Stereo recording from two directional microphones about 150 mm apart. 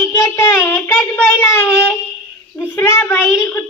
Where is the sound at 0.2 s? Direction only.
20° left (ahead or behind).